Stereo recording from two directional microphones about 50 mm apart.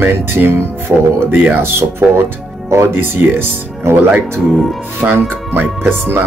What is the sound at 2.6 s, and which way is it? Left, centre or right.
Speech, right.